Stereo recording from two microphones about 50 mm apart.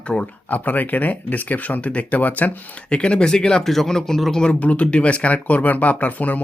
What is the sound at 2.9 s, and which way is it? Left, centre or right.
Speech, left.